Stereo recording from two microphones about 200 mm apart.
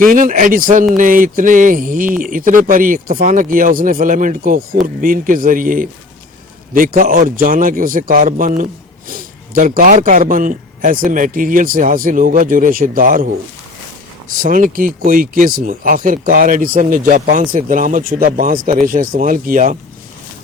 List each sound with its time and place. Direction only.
0.1 s speech: 40° right (ahead or behind)
14.3 s speech: 45° right (ahead or behind)